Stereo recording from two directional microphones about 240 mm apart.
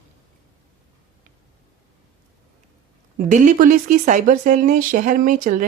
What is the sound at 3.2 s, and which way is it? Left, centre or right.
Speech, right.